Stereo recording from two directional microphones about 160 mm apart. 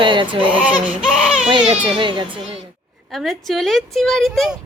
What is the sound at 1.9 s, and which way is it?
Speech, 30° right (ahead or behind).